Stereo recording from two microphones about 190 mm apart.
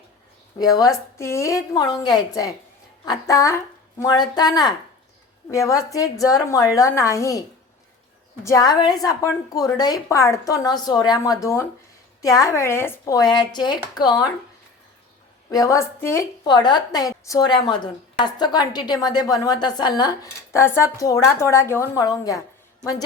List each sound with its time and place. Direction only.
0.6 s a woman's voice: 20° left (ahead or behind)
8.4 s a woman's voice: 20° left (ahead or behind)
15.4 s a woman's voice: 15° left (ahead or behind)